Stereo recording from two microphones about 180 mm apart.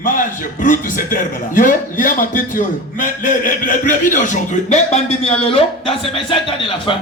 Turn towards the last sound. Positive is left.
turn(degrees=30)  # may be behind; listen again after turning